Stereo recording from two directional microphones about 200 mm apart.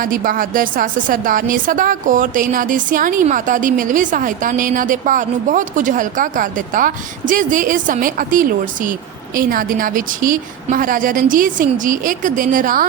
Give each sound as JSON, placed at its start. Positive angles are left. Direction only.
{"t": 0.0, "sound": "a woman's voice", "side_deg": -45}